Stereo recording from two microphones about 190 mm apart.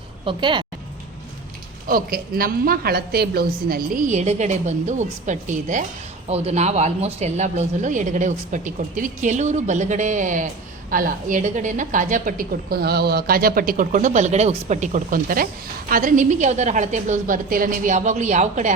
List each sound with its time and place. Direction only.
0.3 s speech: 25° right (ahead or behind)
1.9 s a woman's voice: 50° right (ahead or behind)